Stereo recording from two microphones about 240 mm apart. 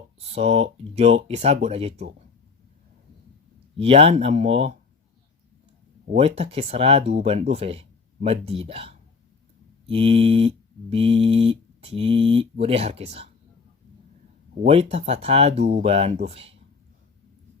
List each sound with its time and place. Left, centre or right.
0.2 s mantra: right
3.8 s mantra: right
6.1 s mantra: right
14.6 s mantra: right